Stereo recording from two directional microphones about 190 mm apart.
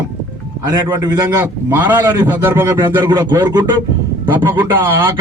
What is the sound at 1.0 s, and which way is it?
A man's voice, 20° right (ahead or behind).